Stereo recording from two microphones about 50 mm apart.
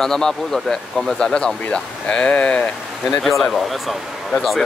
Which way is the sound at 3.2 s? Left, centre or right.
Centre.